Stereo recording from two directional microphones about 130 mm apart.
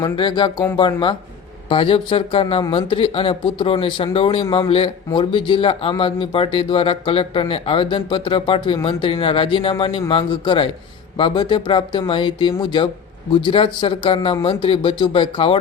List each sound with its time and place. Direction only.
0.0 s speech: 35° left (ahead or behind)